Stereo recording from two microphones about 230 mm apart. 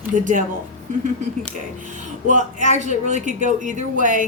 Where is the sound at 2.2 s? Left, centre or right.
Right.